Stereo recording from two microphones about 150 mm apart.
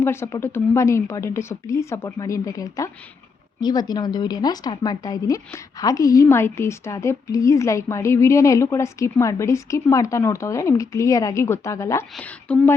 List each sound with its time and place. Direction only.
0.0 s speech: 15° left (ahead or behind)
12.1 s a woman's voice: 10° left (ahead or behind)